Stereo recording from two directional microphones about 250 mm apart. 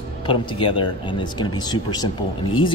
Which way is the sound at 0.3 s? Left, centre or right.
Centre.